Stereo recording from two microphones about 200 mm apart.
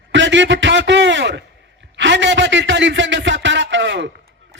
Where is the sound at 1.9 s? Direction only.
65° right (ahead or behind).